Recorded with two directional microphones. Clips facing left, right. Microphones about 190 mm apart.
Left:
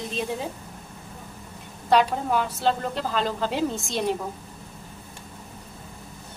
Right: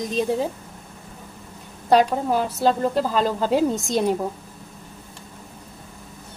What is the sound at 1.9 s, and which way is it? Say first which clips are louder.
A woman's voice: right 3 dB; 40° right (ahead or behind).